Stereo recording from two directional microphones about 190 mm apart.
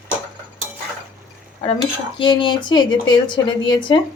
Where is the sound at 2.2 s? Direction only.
25° left (ahead or behind).